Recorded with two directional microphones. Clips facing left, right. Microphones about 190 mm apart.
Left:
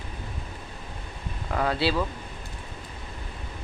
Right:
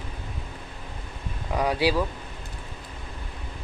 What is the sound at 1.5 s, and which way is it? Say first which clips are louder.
Speech: right 2 dB; 15° right (ahead or behind).